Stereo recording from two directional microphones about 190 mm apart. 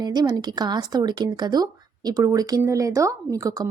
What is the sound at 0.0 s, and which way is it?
A woman's voice, 20° right (ahead or behind).